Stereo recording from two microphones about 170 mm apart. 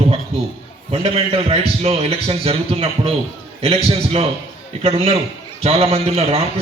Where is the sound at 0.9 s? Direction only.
35° right (ahead or behind).